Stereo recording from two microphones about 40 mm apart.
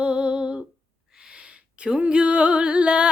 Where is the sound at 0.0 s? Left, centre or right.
Right.